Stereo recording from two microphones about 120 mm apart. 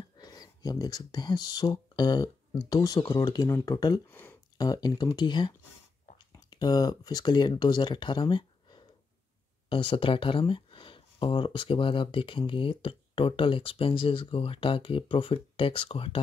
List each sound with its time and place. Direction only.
0.2 s speech: 35° left (ahead or behind)
4.1 s speech: 15° left (ahead or behind)
4.6 s speech: 35° left (ahead or behind); by 16.2 s 50° left (ahead or behind)